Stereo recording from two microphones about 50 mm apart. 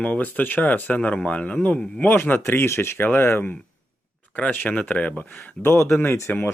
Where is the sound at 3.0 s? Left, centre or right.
Left.